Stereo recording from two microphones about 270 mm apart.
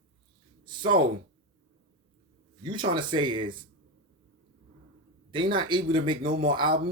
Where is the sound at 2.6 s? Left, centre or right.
Centre.